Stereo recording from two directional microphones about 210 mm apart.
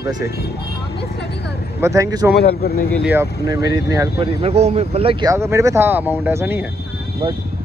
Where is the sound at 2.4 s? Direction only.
50° left (ahead or behind).